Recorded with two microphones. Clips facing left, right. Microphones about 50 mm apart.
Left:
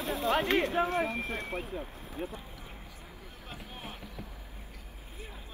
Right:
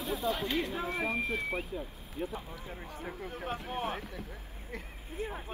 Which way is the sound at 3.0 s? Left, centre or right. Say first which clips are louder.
Right 14 dB; right.